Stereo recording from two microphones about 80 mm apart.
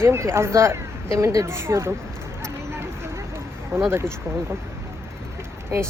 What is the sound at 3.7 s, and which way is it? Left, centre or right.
Speech, right.